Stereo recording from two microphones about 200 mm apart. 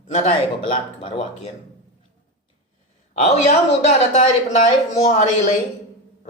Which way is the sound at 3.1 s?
35° left (ahead or behind).